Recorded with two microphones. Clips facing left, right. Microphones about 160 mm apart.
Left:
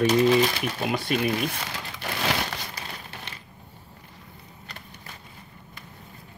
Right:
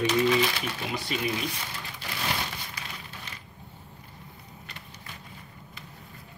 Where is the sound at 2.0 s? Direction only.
70° left (ahead or behind).